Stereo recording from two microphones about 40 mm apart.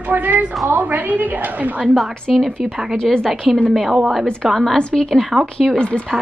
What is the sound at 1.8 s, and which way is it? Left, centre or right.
Speech, centre.